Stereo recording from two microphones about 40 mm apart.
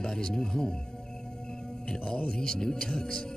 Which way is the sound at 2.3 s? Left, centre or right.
Centre.